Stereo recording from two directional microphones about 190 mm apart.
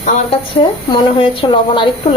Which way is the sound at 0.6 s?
25° left (ahead or behind).